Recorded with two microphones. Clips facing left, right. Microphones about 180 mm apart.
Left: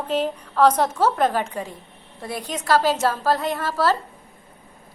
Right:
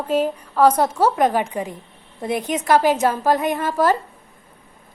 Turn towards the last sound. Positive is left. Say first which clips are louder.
# right 3 dB
turn(degrees=-15)  # may be behind; listen again after turning